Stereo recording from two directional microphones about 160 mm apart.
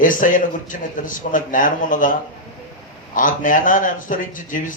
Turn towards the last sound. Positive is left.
turn(degrees=55)  # may be behind; listen again after turning